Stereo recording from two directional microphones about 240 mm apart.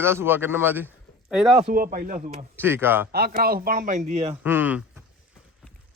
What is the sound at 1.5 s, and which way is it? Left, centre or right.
Speech, right.